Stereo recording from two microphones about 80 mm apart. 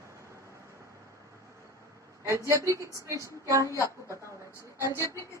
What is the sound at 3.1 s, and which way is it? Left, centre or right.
Child singing, right.